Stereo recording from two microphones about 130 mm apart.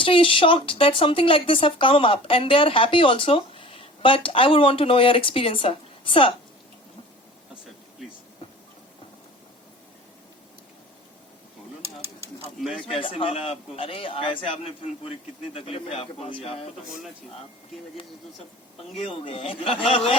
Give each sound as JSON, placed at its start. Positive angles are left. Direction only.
{"t": 0.0, "sound": "speech", "side_deg": 45}
{"t": 12.8, "sound": "speech", "side_deg": 40}
{"t": 18.9, "sound": "speech", "side_deg": 45}